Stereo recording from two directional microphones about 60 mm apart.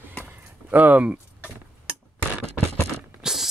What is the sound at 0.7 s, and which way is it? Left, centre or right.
Speech, right.